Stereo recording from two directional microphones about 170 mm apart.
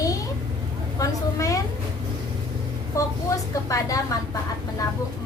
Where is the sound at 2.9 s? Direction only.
20° left (ahead or behind).